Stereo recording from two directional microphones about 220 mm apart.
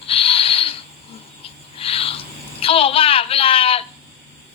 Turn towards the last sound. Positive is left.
turn(degrees=25)  # may be behind; listen again after turning